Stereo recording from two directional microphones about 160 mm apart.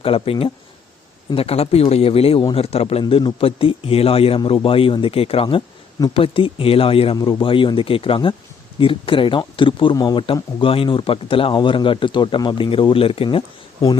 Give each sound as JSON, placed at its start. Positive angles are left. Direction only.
{"t": 0.0, "sound": "a man's voice", "side_deg": 35}